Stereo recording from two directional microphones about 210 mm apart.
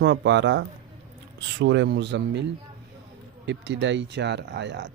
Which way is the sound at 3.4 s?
60° right (ahead or behind).